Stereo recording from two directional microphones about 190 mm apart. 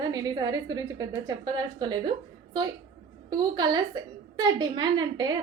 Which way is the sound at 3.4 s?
20° right (ahead or behind).